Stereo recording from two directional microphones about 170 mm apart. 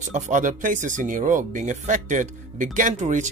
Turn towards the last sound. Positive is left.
turn(degrees=-45)  # may be behind; listen again after turning